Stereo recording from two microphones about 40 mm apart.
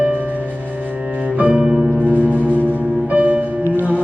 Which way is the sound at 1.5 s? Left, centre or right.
Centre.